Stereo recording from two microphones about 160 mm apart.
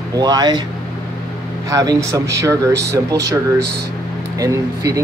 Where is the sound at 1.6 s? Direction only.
20° right (ahead or behind).